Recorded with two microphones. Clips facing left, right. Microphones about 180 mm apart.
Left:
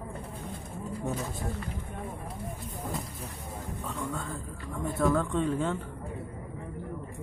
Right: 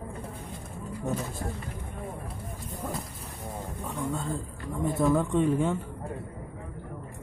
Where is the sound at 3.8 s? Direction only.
15° right (ahead or behind).